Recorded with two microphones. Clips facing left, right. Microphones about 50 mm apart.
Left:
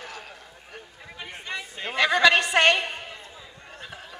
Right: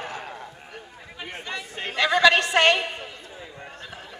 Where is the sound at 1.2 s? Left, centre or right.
Centre.